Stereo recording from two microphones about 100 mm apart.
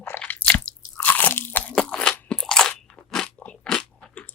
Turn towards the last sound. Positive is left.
turn(degrees=15)  # may be behind; listen again after turning